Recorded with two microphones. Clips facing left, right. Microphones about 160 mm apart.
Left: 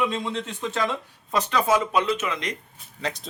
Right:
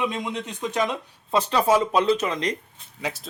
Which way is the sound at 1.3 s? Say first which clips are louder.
Right 2 dB; 30° right (ahead or behind).